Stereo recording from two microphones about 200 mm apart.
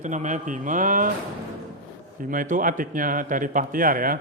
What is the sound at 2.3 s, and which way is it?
Speech, 40° right (ahead or behind).